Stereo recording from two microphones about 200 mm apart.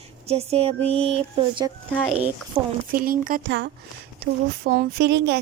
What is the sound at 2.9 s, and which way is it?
Speech, 45° right (ahead or behind).